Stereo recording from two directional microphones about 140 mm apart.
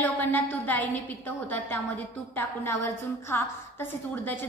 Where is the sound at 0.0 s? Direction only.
10° left (ahead or behind).